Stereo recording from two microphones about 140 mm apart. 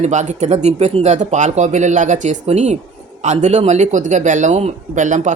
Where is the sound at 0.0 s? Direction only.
55° right (ahead or behind).